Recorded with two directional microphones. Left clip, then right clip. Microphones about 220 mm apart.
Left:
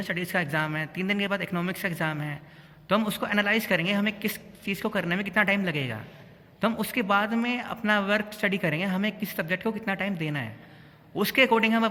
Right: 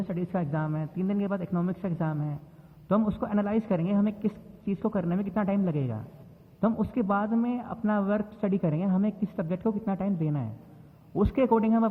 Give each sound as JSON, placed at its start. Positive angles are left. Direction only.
{"t": 0.0, "sound": "a man's voice", "side_deg": 35}